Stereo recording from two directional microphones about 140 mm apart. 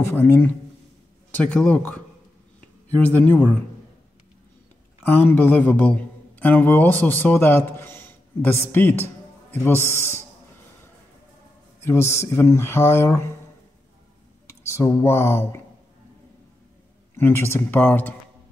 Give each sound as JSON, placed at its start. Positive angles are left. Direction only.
{"t": 0.0, "sound": "speech", "side_deg": 15}
{"t": 3.0, "sound": "speech", "side_deg": 10}
{"t": 5.0, "sound": "a man's voice", "side_deg": 10}
{"t": 11.8, "sound": "speech", "side_deg": 20}
{"t": 14.5, "sound": "speech", "side_deg": 20}
{"t": 17.1, "sound": "speech", "side_deg": 15}